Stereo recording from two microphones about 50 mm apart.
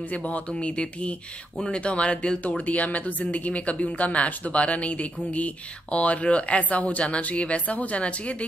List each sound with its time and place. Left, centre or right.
0.1 s speech: left